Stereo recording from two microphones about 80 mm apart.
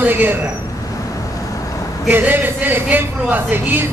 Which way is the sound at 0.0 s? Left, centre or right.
Right.